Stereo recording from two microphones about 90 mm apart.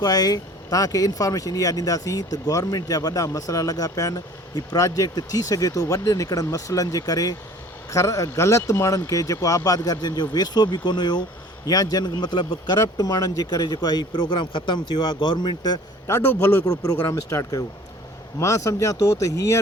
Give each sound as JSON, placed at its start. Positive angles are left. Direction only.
{"t": 0.0, "sound": "speech", "side_deg": 45}
{"t": 16.0, "sound": "a man's voice", "side_deg": 25}
{"t": 16.6, "sound": "speech", "side_deg": 45}